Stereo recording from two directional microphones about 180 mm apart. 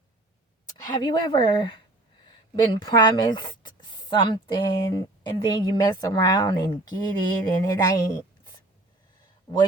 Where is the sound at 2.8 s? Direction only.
25° left (ahead or behind).